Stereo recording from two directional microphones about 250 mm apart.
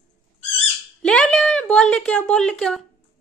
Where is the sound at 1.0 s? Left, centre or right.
Centre.